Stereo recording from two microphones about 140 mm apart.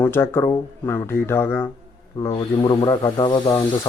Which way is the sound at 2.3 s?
35° left (ahead or behind).